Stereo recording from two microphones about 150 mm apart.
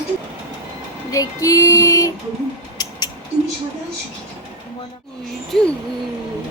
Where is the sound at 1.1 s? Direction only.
20° left (ahead or behind).